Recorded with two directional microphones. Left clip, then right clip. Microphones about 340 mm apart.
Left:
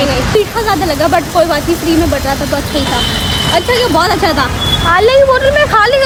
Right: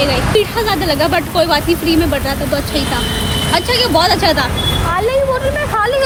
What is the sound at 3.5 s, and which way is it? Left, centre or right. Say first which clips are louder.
Speech: left 2 dB; centre.